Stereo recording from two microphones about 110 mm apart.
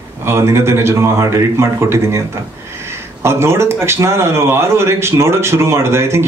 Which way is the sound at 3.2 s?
25° right (ahead or behind).